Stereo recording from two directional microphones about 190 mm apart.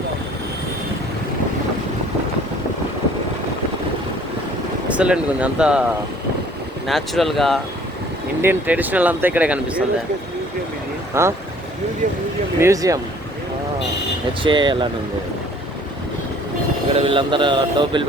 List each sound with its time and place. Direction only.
4.9 s speech: 5° right (ahead or behind)
6.8 s speech: centre (ahead or behind)
8.4 s speech: 10° right (ahead or behind)
11.1 s speech: 15° right (ahead or behind)
12.5 s speech: 15° right (ahead or behind)
14.4 s a sound: 25° right (ahead or behind)
16.9 s a sound: 30° right (ahead or behind)